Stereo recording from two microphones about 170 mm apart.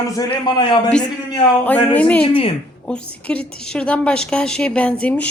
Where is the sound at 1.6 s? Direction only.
10° left (ahead or behind).